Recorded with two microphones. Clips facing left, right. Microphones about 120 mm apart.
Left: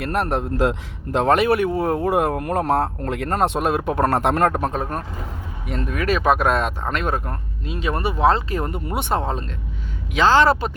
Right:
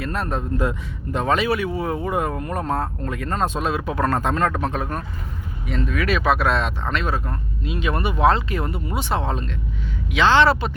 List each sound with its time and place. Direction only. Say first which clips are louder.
0.0 s speech: left 4 dB; 65° left (ahead or behind)
4.5 s speech: left 2 dB; 40° left (ahead or behind)
9.2 s speech: even; 35° left (ahead or behind)